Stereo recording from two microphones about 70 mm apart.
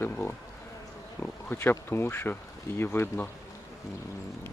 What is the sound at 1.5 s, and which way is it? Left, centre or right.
Speech, left.